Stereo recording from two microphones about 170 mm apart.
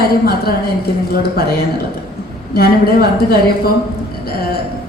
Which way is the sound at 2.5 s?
65° left (ahead or behind).